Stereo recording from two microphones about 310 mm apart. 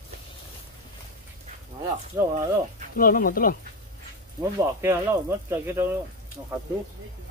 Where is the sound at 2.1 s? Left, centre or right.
Centre.